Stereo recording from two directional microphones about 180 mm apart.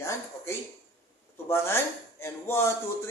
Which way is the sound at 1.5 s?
15° left (ahead or behind).